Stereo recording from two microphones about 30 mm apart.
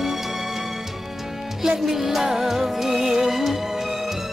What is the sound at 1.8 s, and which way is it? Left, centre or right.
Music, centre.